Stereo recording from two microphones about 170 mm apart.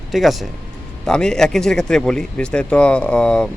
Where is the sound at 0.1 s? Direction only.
Centre (ahead or behind).